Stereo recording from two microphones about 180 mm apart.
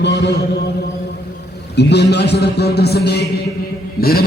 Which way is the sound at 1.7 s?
70° left (ahead or behind).